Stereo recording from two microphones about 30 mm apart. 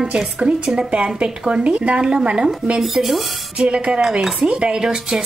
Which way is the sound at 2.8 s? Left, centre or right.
Centre.